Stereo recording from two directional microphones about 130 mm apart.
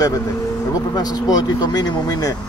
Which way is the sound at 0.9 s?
30° left (ahead or behind).